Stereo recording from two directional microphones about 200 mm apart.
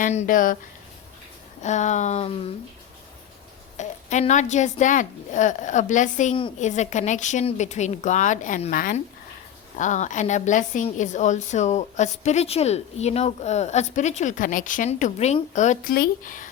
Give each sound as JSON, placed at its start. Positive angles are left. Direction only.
{"t": 0.0, "sound": "a woman's voice", "side_deg": 40}
{"t": 1.6, "sound": "a woman's voice", "side_deg": 35}
{"t": 3.8, "sound": "a woman's voice", "side_deg": 35}